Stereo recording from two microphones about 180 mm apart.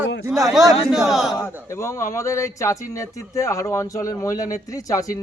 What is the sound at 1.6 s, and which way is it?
Speech, 15° left (ahead or behind).